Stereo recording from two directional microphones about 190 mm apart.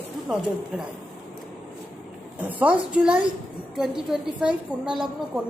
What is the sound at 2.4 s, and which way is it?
A man's voice, 10° right (ahead or behind).